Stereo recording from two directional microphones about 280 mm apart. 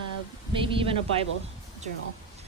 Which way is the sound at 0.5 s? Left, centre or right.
Centre.